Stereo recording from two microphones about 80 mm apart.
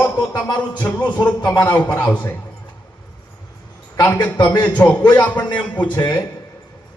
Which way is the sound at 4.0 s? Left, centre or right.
Left.